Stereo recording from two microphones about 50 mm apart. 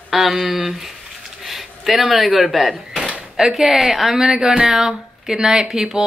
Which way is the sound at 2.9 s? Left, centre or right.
Right.